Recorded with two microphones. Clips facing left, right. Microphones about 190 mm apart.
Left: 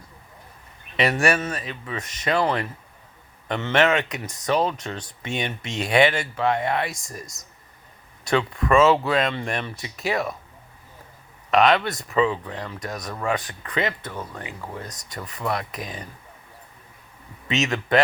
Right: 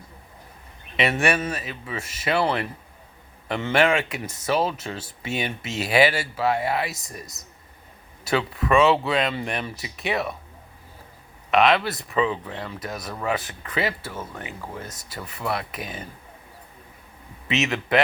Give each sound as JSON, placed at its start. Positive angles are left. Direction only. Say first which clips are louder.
{"t": 1.2, "sound": "speech", "louder": "left 1 dB", "side_deg": -5}
{"t": 3.5, "sound": "speech", "louder": "even", "side_deg": -10}
{"t": 11.5, "sound": "speech", "louder": "left 1 dB", "side_deg": 0}
{"t": 15.5, "sound": "speech", "louder": "left 1 dB", "side_deg": -25}
{"t": 17.6, "sound": "speech", "louder": "left 1 dB", "side_deg": -5}